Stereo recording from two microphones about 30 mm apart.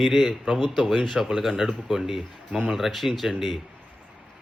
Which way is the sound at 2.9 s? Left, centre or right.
Centre.